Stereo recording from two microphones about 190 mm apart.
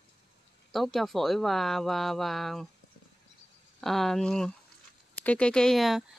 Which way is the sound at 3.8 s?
Centre (ahead or behind).